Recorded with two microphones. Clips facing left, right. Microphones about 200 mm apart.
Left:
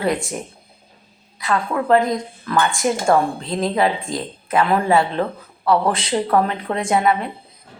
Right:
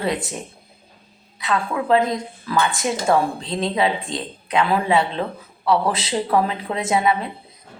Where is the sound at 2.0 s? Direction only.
5° right (ahead or behind).